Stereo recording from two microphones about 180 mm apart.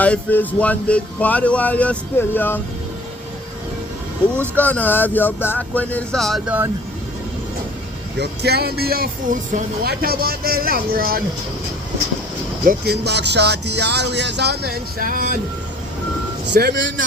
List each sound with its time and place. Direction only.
0.0 s speech: 10° left (ahead or behind)
4.4 s speech: 10° left (ahead or behind)
8.2 s speech: 65° right (ahead or behind)
12.6 s music: 65° right (ahead or behind)
16.5 s speech: 70° right (ahead or behind); by 17.1 s 90° right